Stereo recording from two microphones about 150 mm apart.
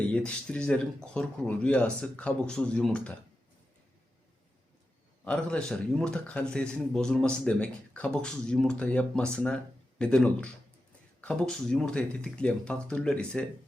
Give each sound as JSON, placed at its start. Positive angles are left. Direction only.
{"t": 0.3, "sound": "a man's voice", "side_deg": 5}
{"t": 5.2, "sound": "a man's voice", "side_deg": 5}